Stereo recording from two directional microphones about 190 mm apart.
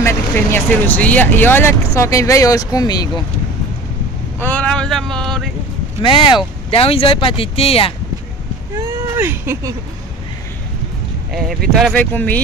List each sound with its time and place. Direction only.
0.0 s speech: 10° left (ahead or behind)
4.4 s speech: 10° left (ahead or behind)
6.0 s speech: 25° left (ahead or behind)
8.7 s speech: 10° right (ahead or behind)
11.7 s speech: 5° left (ahead or behind)